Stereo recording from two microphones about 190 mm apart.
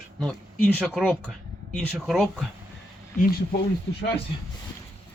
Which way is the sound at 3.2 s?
55° left (ahead or behind).